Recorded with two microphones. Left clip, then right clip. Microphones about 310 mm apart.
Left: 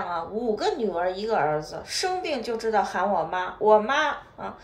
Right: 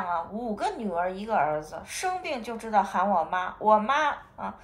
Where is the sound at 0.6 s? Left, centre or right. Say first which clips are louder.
Even; centre.